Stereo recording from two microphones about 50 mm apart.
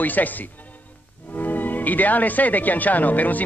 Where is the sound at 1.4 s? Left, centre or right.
Left.